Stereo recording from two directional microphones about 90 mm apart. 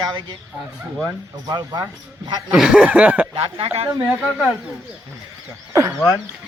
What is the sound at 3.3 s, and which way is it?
Speech, 90° right.